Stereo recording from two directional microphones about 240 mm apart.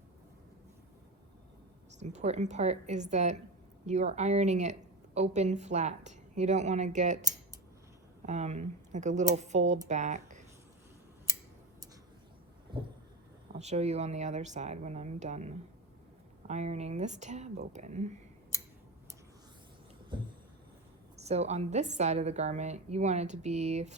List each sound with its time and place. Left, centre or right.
2.0 s a woman's voice: right
8.3 s a woman's voice: right
13.5 s a woman's voice: right
20.1 s a woman's voice: centre